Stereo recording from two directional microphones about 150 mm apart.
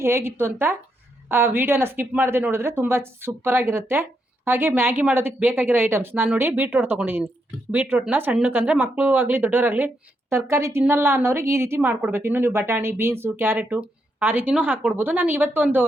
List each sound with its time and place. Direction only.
0.0 s speech: 15° right (ahead or behind)